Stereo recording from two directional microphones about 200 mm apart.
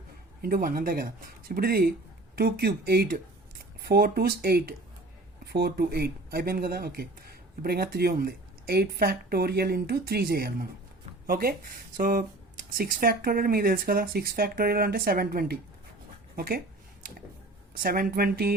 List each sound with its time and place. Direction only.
0.4 s speech: 45° right (ahead or behind)
17.8 s speech: 45° right (ahead or behind)